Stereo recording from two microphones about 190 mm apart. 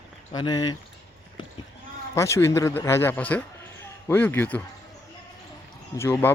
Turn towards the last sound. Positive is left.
turn(degrees=10)  # may be behind; listen again after turning